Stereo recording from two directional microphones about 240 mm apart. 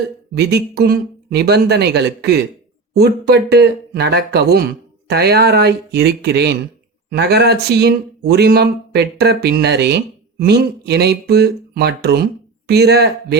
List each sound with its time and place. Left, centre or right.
0.3 s speech: right